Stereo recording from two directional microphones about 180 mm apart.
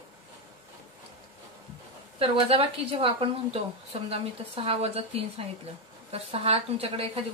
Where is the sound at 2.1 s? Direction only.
30° right (ahead or behind).